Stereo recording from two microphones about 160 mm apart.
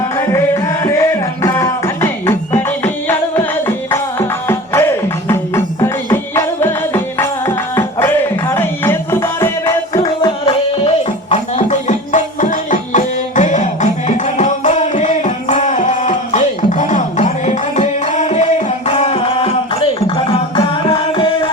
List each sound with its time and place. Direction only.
0.3 s music: 20° left (ahead or behind)
10.0 s music: 30° left (ahead or behind)
11.3 s music: 50° left (ahead or behind); by 21.5 s 30° left (ahead or behind)